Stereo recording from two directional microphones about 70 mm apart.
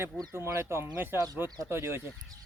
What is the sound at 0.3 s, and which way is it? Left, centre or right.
Speech, right.